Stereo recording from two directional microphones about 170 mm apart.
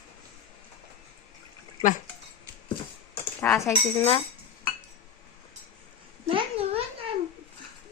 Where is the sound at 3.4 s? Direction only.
15° left (ahead or behind).